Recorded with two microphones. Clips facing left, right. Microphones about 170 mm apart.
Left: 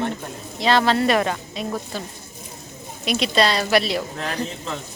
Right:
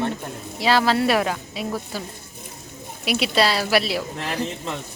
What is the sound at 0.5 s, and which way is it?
Speech, 5° right (ahead or behind).